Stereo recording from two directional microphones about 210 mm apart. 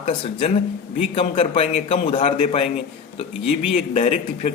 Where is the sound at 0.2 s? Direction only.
25° left (ahead or behind).